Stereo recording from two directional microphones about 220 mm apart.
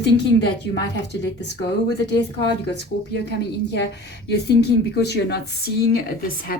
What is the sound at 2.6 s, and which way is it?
Speech, 50° left (ahead or behind).